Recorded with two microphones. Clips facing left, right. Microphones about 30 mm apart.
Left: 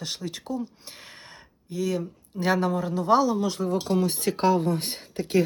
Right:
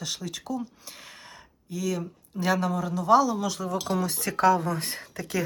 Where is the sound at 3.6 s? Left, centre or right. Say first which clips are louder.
Left 4 dB; right.